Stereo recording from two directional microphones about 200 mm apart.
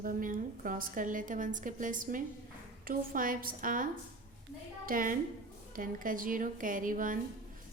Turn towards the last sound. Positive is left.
turn(degrees=-40)  # may be behind; listen again after turning